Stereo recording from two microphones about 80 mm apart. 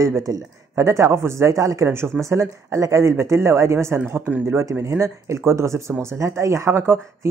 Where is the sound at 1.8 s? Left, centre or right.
Right.